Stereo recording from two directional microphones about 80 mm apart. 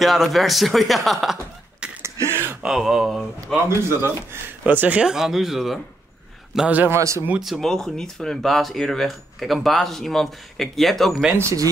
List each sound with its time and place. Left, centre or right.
0.0 s speech: centre
2.0 s a sound: right
2.6 s speech: centre
3.6 s speech: right; by 5.8 s centre
6.7 s a man's voice: right
7.0 s speech: right
7.3 s speech: centre
7.6 s speech: centre